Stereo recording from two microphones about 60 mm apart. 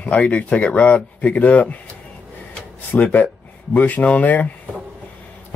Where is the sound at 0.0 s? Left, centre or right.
Left.